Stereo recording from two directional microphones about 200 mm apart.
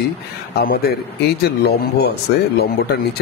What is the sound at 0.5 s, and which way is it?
A man's voice, 50° left (ahead or behind).